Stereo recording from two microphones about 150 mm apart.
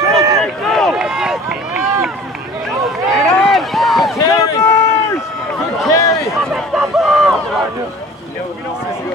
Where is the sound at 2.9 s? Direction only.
Centre (ahead or behind).